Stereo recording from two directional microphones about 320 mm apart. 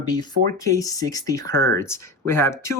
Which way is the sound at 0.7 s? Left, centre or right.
Centre.